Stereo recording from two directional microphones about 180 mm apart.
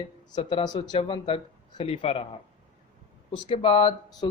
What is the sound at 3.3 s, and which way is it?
Speech, 25° left (ahead or behind).